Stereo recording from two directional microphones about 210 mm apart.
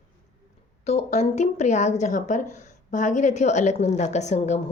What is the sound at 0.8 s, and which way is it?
Speech, 30° left (ahead or behind).